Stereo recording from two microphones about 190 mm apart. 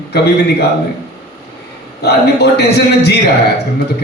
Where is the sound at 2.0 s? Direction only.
60° left (ahead or behind).